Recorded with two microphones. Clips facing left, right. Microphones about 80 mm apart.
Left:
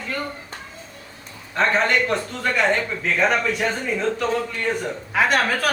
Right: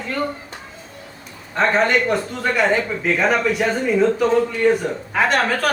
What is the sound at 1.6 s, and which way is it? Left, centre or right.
A man's voice, centre.